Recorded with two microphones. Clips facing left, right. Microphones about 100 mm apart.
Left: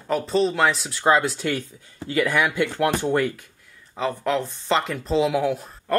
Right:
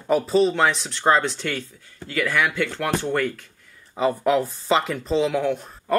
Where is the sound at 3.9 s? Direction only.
5° right (ahead or behind).